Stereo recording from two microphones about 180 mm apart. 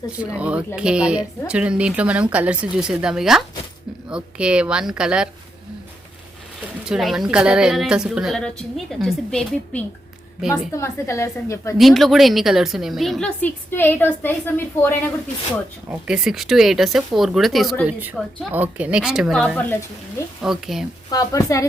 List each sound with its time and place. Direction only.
0.3 s speech: 5° right (ahead or behind)
6.8 s speech: centre (ahead or behind)
10.7 s a woman's voice: 15° left (ahead or behind)
11.8 s speech: centre (ahead or behind)
15.9 s speech: 5° right (ahead or behind)
21.1 s a woman's voice: 20° left (ahead or behind)